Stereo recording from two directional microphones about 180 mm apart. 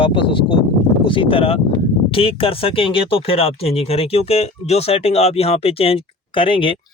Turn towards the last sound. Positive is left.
turn(degrees=30)  # may be behind; listen again after turning